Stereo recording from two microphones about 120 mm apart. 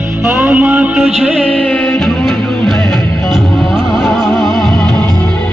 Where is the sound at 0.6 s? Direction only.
10° right (ahead or behind).